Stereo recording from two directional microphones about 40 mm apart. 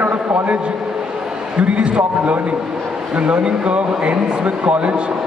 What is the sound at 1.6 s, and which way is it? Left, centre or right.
A man's voice, right.